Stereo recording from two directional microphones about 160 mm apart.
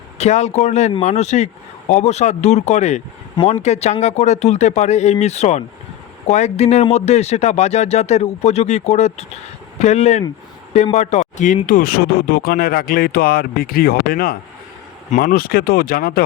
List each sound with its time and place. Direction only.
0.2 s speech: 45° left (ahead or behind); by 16.2 s 70° left (ahead or behind)